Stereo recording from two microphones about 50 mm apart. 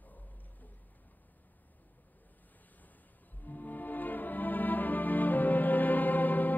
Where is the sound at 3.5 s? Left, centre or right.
Left.